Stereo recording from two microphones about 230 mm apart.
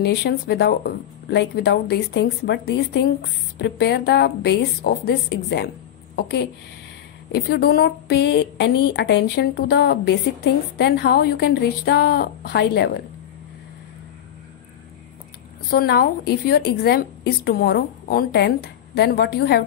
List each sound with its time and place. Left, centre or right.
0.0 s a woman's voice: left
15.7 s a woman's voice: left